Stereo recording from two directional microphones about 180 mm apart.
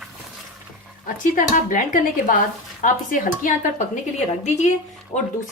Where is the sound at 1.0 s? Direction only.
50° left (ahead or behind).